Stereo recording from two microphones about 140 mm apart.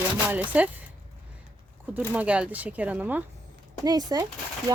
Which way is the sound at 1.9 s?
10° right (ahead or behind).